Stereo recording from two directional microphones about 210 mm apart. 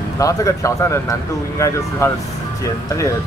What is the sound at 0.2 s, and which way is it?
Speech, 15° left (ahead or behind).